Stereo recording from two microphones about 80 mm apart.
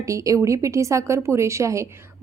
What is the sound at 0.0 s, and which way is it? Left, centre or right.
A woman's voice, right.